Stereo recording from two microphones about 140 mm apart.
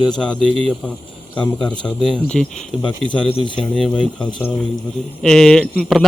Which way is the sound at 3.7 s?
5° left (ahead or behind).